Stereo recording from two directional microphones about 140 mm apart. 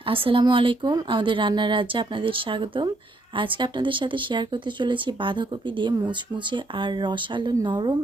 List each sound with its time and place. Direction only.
0.0 s speech: 40° right (ahead or behind)